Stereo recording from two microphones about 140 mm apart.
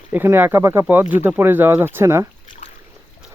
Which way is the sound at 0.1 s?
15° right (ahead or behind).